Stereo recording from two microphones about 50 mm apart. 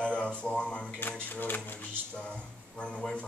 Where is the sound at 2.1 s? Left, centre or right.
Left.